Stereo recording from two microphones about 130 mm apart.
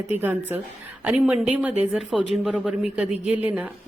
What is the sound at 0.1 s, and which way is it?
A woman's voice, 15° right (ahead or behind).